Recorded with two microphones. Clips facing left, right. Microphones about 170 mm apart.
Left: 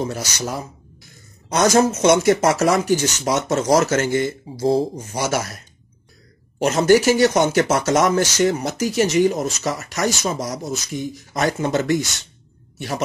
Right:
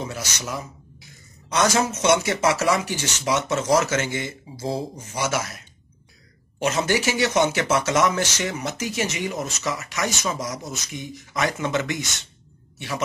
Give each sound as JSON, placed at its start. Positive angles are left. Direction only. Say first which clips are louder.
{"t": 0.0, "sound": "speech", "louder": "left 6 dB", "side_deg": 40}
{"t": 6.6, "sound": "speech", "louder": "left 8 dB", "side_deg": 40}